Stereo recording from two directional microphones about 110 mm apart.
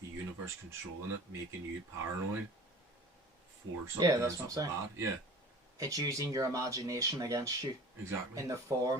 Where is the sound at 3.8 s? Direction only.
30° right (ahead or behind).